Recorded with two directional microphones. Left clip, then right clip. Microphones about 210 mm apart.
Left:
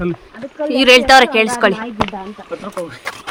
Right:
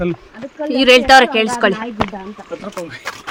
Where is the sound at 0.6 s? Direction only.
20° left (ahead or behind).